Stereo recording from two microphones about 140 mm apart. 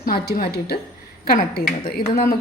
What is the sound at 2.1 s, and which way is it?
Speech, 90° left.